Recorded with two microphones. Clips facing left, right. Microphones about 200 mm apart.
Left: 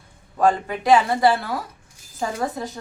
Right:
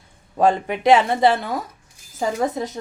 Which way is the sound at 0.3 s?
25° right (ahead or behind).